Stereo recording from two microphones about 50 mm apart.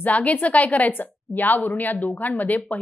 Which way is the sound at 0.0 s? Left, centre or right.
Left.